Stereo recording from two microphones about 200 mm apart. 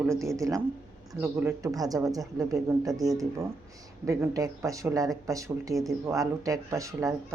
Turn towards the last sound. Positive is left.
turn(degrees=-15)  # may be behind; listen again after turning